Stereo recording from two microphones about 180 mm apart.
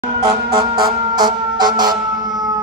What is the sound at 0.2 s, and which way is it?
Music, 20° right (ahead or behind).